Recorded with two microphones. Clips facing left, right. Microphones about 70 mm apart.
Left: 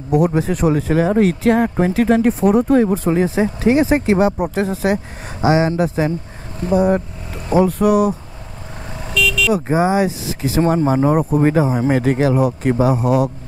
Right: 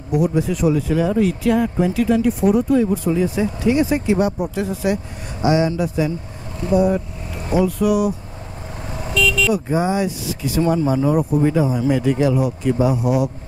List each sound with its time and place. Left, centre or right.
0.1 s speech: left
3.3 s speech: left
9.0 s vehicle: right
9.5 s speech: left
12.7 s speech: left